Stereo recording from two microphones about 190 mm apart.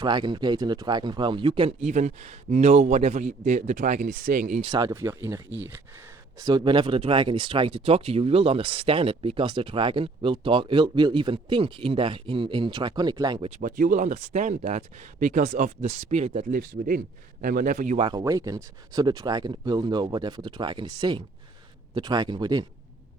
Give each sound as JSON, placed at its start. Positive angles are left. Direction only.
{"t": 0.0, "sound": "speech", "side_deg": -25}
{"t": 4.6, "sound": "speech", "side_deg": -20}
{"t": 6.4, "sound": "speech", "side_deg": -25}
{"t": 13.6, "sound": "a man's voice", "side_deg": -45}
{"t": 18.0, "sound": "speech", "side_deg": -20}